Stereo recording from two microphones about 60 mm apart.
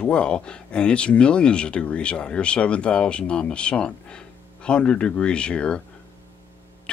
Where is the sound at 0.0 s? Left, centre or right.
Centre.